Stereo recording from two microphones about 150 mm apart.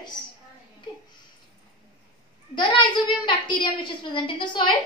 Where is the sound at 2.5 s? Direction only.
30° left (ahead or behind).